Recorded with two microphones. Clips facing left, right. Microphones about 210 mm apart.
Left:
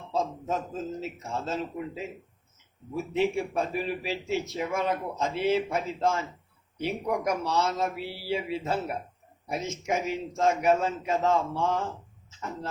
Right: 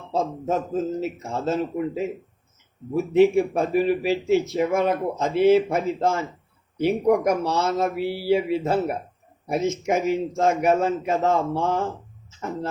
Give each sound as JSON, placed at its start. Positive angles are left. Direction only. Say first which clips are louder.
{"t": 0.1, "sound": "speech", "louder": "right 5 dB", "side_deg": -50}